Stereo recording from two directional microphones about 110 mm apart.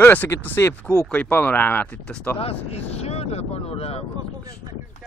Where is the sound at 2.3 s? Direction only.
65° left (ahead or behind).